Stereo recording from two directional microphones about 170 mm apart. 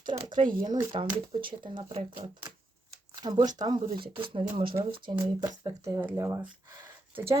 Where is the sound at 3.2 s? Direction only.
25° right (ahead or behind).